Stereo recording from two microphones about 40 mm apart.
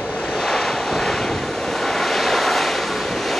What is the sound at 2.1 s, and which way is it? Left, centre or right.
Vehicle, centre.